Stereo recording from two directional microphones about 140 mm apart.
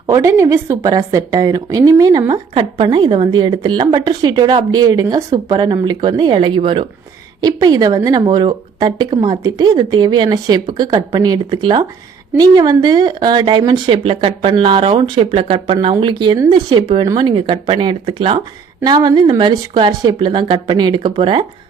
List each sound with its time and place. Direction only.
0.1 s a woman's voice: 20° right (ahead or behind)
2.6 s a woman's voice: 35° right (ahead or behind)
7.4 s a woman's voice: 30° right (ahead or behind)
18.8 s a woman's voice: 30° right (ahead or behind)